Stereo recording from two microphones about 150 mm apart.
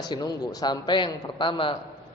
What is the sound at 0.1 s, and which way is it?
A man's voice, 25° left (ahead or behind).